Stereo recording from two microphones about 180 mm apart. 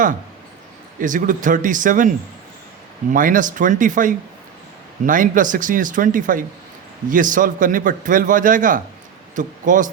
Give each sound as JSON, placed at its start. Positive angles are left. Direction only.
{"t": 0.9, "sound": "a man's voice", "side_deg": -45}